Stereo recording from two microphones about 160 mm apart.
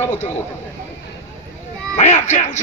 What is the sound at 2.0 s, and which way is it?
Speech, 45° left (ahead or behind).